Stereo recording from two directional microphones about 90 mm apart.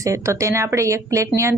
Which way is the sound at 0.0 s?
35° right (ahead or behind).